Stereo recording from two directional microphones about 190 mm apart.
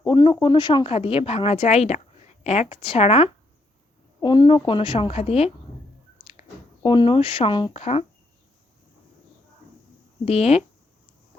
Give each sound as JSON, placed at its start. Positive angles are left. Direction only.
{"t": 0.0, "sound": "a woman's voice", "side_deg": 25}
{"t": 6.8, "sound": "a woman's voice", "side_deg": 25}
{"t": 10.2, "sound": "speech", "side_deg": 35}